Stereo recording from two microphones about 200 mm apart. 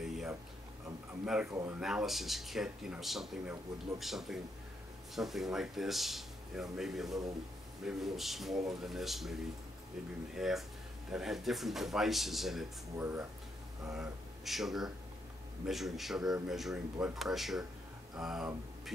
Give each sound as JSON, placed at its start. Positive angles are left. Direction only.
{"t": 0.0, "sound": "a sound", "side_deg": 0}
{"t": 1.2, "sound": "speech", "side_deg": -5}
{"t": 1.5, "sound": "speech", "side_deg": -15}
{"t": 1.8, "sound": "speech", "side_deg": -5}